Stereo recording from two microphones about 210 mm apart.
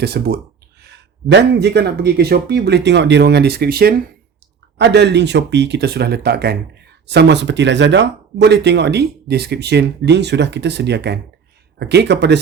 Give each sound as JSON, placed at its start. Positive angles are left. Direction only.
{"t": 0.0, "sound": "speech", "side_deg": -50}